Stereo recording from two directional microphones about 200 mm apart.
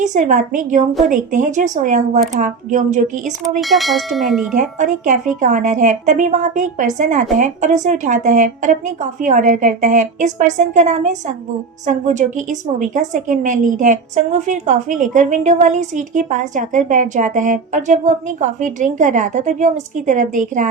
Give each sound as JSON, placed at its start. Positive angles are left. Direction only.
{"t": 0.0, "sound": "a woman's voice", "side_deg": -40}
{"t": 3.6, "sound": "tubular bells", "side_deg": 0}
{"t": 4.5, "sound": "a woman's voice", "side_deg": -40}